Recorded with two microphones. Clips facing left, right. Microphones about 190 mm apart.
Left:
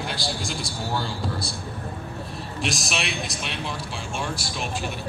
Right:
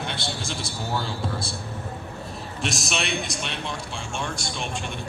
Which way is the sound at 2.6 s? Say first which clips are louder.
Even; centre (ahead or behind).